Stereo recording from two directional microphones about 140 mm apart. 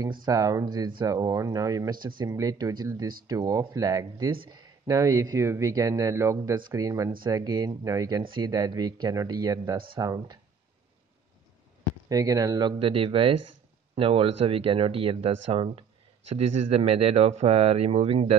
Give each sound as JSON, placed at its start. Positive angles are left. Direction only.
{"t": 0.1, "sound": "speech", "side_deg": -30}
{"t": 12.1, "sound": "speech", "side_deg": -25}
{"t": 12.7, "sound": "speech", "side_deg": -40}